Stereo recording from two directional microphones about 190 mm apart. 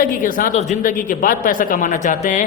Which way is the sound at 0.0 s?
45° left (ahead or behind).